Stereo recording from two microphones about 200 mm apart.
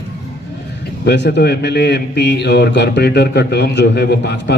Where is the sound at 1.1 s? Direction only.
60° left (ahead or behind).